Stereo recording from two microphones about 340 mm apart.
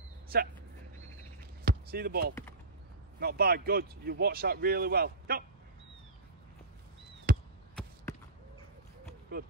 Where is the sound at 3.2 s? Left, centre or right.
Right.